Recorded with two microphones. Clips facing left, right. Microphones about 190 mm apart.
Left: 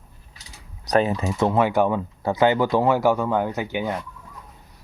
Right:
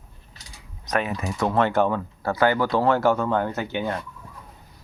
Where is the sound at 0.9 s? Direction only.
30° left (ahead or behind).